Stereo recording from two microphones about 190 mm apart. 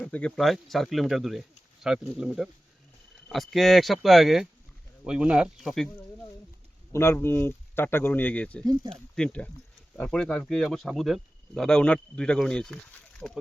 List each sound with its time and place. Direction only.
0.0 s speech: 5° left (ahead or behind)
6.9 s speech: 15° left (ahead or behind)
8.6 s speech: 20° right (ahead or behind)
9.1 s speech: 5° left (ahead or behind)